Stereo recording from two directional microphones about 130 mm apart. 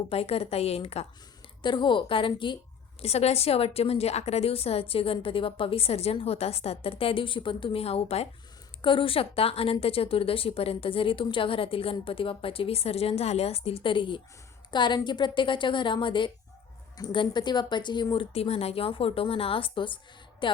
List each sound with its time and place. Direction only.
0.1 s a woman's voice: 50° left (ahead or behind)
1.6 s speech: 35° left (ahead or behind)
3.0 s a woman's voice: 55° left (ahead or behind)
8.8 s a woman's voice: 40° left (ahead or behind)